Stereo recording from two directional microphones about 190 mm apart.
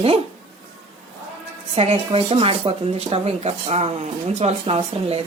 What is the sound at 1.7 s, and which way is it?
Speech, 30° right (ahead or behind).